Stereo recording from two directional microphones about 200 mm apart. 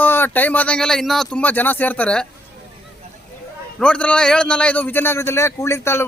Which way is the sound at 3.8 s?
5° left (ahead or behind).